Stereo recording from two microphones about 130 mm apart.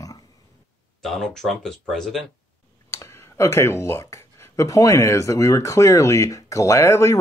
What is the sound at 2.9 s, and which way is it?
Speech, 20° left (ahead or behind).